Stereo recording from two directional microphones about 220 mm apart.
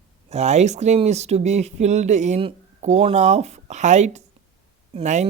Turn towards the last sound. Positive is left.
turn(degrees=-30)  # may be behind; listen again after turning